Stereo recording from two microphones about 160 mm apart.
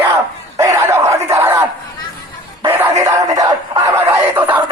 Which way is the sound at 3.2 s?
20° right (ahead or behind).